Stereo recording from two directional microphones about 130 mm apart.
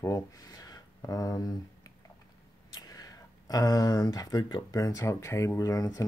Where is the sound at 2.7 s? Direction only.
30° left (ahead or behind).